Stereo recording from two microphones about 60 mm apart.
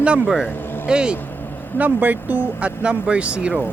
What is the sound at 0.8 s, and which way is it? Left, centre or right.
Speech, centre.